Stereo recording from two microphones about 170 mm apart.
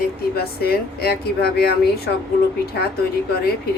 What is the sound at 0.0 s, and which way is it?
Speech, 65° left (ahead or behind).